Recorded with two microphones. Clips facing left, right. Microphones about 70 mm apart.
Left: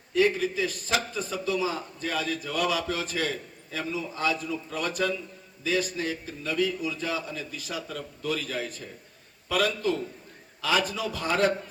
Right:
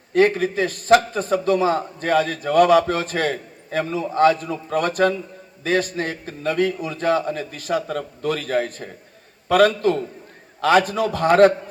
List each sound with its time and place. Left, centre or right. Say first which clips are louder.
0.1 s a man's voice: right 7 dB; right